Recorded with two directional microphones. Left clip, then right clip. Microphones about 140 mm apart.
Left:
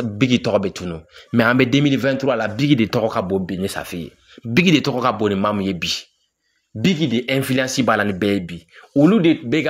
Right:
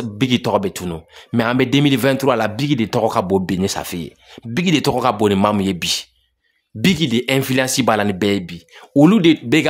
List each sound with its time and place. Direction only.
0.2 s speech: 15° right (ahead or behind)
0.8 s speech: 25° right (ahead or behind)
1.3 s speech: centre (ahead or behind)
1.9 s speech: 40° right (ahead or behind)
2.5 s speech: 10° right (ahead or behind)
3.0 s speech: 35° right (ahead or behind)
3.3 s speech: 45° right (ahead or behind)
3.6 s speech: 25° right (ahead or behind)
5.1 s speech: 35° right (ahead or behind)
6.8 s speech: 40° right (ahead or behind); by 8.6 s 25° right (ahead or behind)
9.0 s speech: 50° right (ahead or behind)